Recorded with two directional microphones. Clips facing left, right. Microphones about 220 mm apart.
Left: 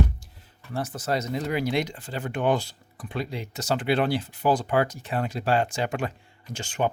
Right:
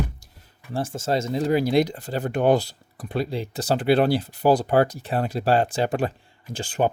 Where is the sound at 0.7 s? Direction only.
30° right (ahead or behind).